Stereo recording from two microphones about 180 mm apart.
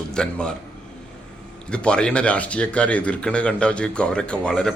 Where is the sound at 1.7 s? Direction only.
5° left (ahead or behind).